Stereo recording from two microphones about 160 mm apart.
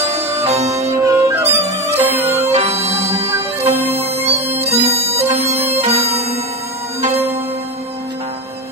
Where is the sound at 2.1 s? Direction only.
40° right (ahead or behind).